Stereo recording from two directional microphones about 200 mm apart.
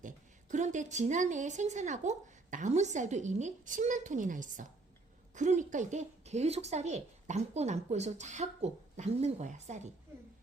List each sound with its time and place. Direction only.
0.0 s a woman's voice: 40° right (ahead or behind)